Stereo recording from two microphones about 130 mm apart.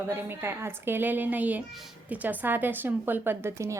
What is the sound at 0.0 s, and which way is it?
A woman's voice, 15° right (ahead or behind).